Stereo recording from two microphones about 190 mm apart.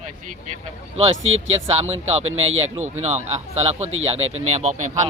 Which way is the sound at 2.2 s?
90° right.